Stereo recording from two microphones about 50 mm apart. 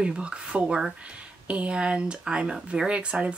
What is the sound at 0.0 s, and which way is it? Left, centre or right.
Speech, right.